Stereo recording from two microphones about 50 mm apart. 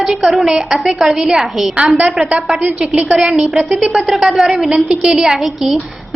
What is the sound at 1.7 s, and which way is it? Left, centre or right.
A woman's voice, right.